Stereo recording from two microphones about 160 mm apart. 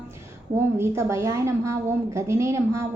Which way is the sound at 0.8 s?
15° right (ahead or behind).